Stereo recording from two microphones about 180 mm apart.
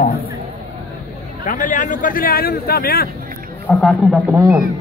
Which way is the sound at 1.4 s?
45° left (ahead or behind).